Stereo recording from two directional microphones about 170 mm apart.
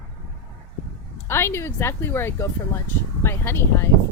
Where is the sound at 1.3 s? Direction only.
15° left (ahead or behind).